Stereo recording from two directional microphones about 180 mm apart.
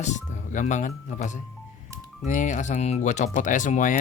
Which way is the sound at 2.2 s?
45° left (ahead or behind).